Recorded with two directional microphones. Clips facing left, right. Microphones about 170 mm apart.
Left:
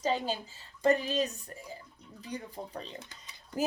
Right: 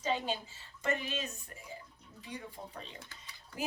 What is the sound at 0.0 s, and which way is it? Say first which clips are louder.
A woman's voice: left 3 dB; 40° left (ahead or behind).